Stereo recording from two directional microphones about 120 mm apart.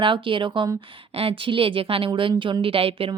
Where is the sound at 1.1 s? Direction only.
55° right (ahead or behind).